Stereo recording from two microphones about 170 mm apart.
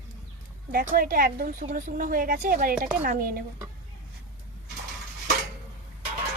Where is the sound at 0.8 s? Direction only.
55° right (ahead or behind).